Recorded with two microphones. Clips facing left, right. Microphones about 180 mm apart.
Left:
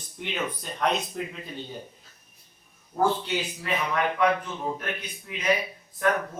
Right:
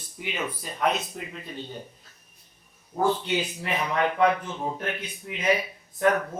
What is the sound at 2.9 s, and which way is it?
Speech, 20° right (ahead or behind).